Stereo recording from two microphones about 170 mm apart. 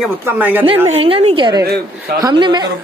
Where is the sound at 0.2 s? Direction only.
10° right (ahead or behind).